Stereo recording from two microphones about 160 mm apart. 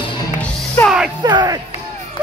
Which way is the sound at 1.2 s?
25° right (ahead or behind).